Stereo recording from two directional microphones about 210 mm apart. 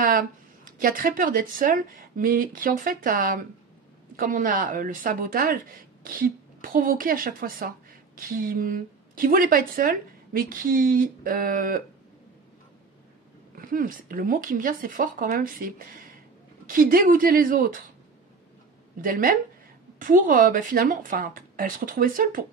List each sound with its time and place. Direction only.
0.0 s a woman's voice: 40° right (ahead or behind)
13.6 s speech: 40° right (ahead or behind)
18.9 s speech: 40° right (ahead or behind)